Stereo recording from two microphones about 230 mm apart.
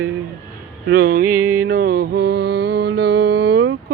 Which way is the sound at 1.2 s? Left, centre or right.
Centre.